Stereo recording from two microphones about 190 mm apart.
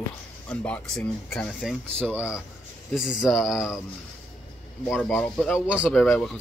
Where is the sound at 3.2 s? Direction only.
Centre (ahead or behind).